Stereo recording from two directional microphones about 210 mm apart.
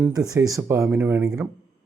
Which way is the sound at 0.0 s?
15° right (ahead or behind).